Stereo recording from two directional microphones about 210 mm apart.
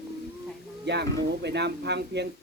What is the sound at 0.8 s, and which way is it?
Speech, 55° right (ahead or behind).